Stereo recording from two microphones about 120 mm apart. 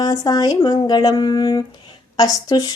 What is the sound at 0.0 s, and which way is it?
A woman's voice, 30° left (ahead or behind).